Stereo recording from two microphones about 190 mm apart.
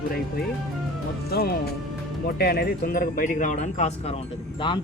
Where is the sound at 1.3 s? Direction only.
55° left (ahead or behind); by 4.2 s 35° left (ahead or behind).